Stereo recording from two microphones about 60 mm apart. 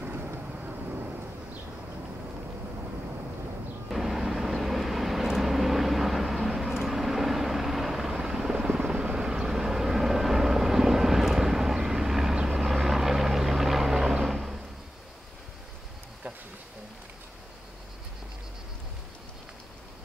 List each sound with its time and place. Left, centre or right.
0.0 s vehicle: right
3.9 s vehicle: centre